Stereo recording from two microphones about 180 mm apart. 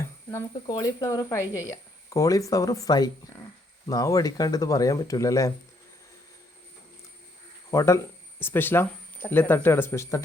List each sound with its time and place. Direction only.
0.0 s a sound: 15° left (ahead or behind)
0.7 s speech: 20° left (ahead or behind)
7.7 s speech: 15° left (ahead or behind)